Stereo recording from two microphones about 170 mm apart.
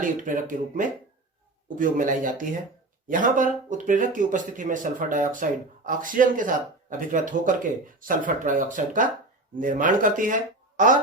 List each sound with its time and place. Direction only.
0.0 s speech: 50° right (ahead or behind)